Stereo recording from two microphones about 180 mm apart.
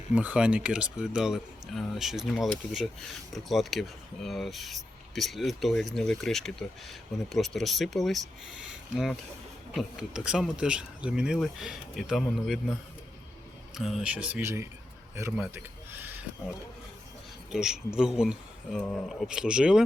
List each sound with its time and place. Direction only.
0.1 s speech: 10° right (ahead or behind)
9.7 s speech: 5° right (ahead or behind)
13.7 s speech: centre (ahead or behind)
15.4 s a sound: 10° right (ahead or behind)
17.5 s speech: 5° right (ahead or behind)